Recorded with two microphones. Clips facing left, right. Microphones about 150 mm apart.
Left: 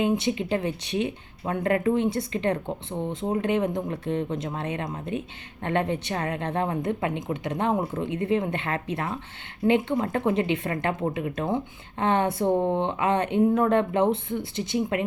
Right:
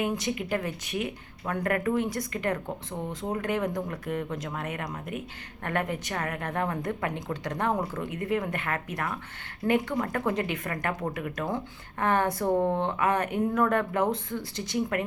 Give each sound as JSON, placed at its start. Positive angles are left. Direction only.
{"t": 0.0, "sound": "speech", "side_deg": 25}